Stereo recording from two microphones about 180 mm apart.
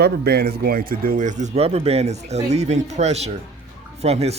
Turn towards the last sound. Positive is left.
turn(degrees=-35)  # may be behind; listen again after turning